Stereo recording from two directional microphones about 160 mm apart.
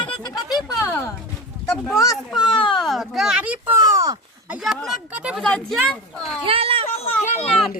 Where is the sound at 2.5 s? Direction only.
30° left (ahead or behind).